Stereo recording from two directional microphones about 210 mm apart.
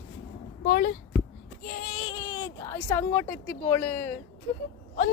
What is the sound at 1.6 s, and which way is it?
Child singing, 40° left (ahead or behind).